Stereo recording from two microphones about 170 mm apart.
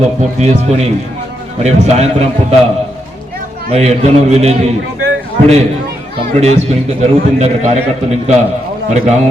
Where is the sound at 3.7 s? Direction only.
40° right (ahead or behind).